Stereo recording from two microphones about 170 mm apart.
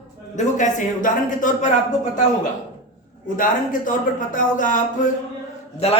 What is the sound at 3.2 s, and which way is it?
Speech, 50° left (ahead or behind).